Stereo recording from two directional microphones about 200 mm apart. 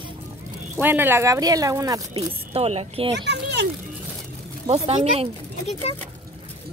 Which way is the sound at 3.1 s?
60° right (ahead or behind).